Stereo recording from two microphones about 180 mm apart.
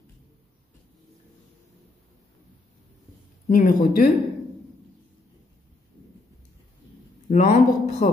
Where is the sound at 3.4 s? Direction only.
50° left (ahead or behind).